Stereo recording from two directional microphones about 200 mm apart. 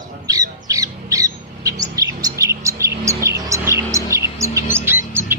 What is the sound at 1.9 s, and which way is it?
Bird, 15° right (ahead or behind).